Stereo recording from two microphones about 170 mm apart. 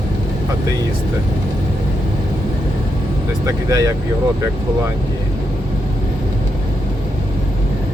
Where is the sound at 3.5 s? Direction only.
20° right (ahead or behind).